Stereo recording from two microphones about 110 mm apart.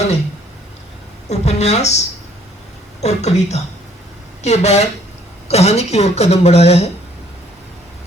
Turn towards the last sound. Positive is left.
turn(degrees=70)  # may be behind; listen again after turning